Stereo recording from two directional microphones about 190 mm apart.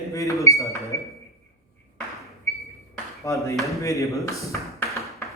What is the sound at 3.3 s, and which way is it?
A man's voice, 15° left (ahead or behind).